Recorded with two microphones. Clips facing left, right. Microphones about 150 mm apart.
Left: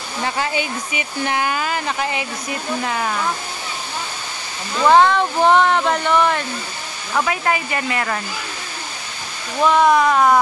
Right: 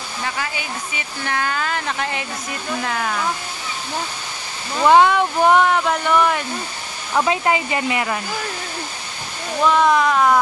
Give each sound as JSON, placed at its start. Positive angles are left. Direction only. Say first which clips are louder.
{"t": 0.2, "sound": "speech", "louder": "left 6 dB", "side_deg": 30}
{"t": 0.9, "sound": "speech", "louder": "left 4 dB", "side_deg": 15}
{"t": 4.8, "sound": "speech", "louder": "even", "side_deg": -10}
{"t": 7.2, "sound": "speech", "louder": "right 2 dB", "side_deg": -20}
{"t": 9.7, "sound": "speech", "louder": "left 2 dB", "side_deg": 5}